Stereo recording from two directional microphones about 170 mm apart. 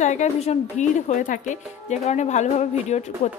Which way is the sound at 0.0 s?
45° left (ahead or behind).